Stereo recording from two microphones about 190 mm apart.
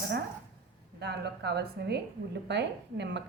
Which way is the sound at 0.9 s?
60° right (ahead or behind).